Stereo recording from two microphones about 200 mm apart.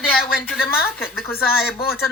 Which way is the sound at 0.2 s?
45° left (ahead or behind).